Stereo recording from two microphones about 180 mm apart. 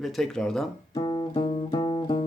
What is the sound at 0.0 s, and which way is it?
Speech, centre (ahead or behind).